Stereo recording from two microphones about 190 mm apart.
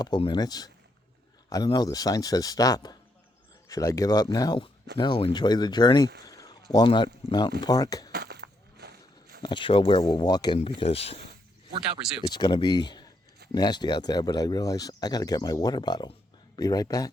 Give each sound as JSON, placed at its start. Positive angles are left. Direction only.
{"t": 0.0, "sound": "speech", "side_deg": 25}
{"t": 6.2, "sound": "a sound", "side_deg": 20}
{"t": 6.7, "sound": "speech", "side_deg": 25}
{"t": 8.1, "sound": "a sound", "side_deg": -60}
{"t": 9.4, "sound": "speech", "side_deg": 25}
{"t": 12.3, "sound": "speech", "side_deg": 25}